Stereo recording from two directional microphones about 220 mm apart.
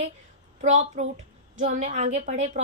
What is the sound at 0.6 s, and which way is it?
A woman's voice, 35° right (ahead or behind).